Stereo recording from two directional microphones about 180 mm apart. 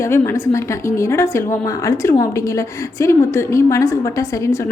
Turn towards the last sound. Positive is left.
turn(degrees=15)  # may be behind; listen again after turning